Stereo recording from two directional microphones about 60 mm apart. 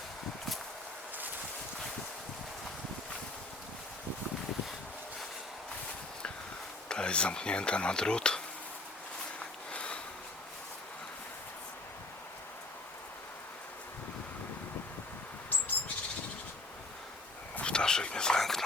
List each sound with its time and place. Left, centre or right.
6.8 s speech: centre
9.4 s a sound: centre
17.6 s whispering: centre